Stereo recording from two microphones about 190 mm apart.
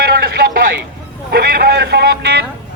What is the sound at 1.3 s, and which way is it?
A man's voice, 55° right (ahead or behind).